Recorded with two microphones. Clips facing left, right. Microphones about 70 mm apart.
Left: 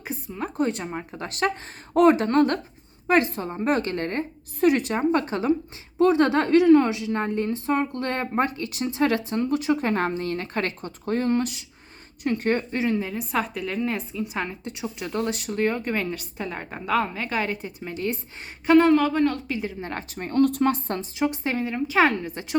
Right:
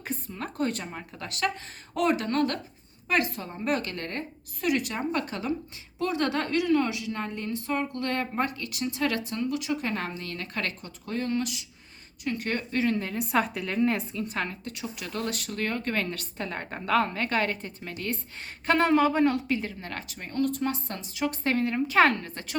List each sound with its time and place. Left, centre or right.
0.1 s a sound: centre
0.5 s a woman's voice: left
12.8 s speech: centre
13.1 s a woman's voice: centre
14.3 s speech: centre
18.6 s a woman's voice: centre
19.8 s a woman's voice: left
21.4 s a woman's voice: centre